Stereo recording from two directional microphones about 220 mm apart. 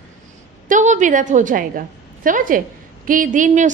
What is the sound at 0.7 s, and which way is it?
A woman's voice, 35° right (ahead or behind).